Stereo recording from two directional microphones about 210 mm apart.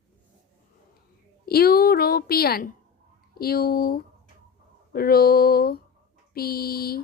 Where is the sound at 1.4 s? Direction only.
45° left (ahead or behind).